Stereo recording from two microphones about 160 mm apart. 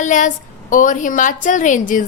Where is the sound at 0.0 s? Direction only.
55° left (ahead or behind).